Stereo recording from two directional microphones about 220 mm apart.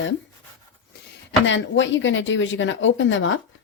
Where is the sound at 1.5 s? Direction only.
55° left (ahead or behind).